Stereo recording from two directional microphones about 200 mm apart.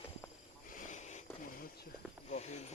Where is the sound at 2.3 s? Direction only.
35° left (ahead or behind).